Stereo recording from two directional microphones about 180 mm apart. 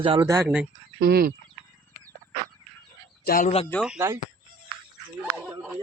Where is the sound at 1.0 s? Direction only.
60° right (ahead or behind).